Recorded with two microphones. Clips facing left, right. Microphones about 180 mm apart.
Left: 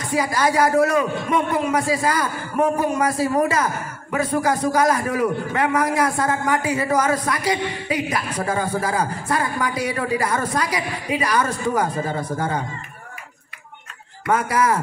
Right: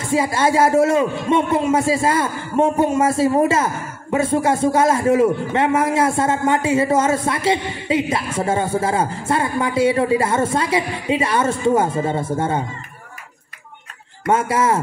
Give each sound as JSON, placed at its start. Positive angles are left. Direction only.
{"t": 0.0, "sound": "a man's voice", "side_deg": -25}
{"t": 14.3, "sound": "a man's voice", "side_deg": -25}